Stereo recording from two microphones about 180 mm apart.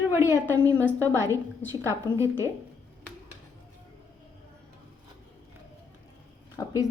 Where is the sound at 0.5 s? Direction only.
15° right (ahead or behind).